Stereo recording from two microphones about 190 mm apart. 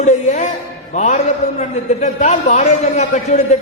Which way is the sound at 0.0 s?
40° left (ahead or behind).